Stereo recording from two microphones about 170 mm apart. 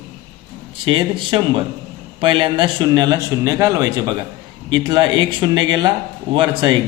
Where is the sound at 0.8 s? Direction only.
30° right (ahead or behind).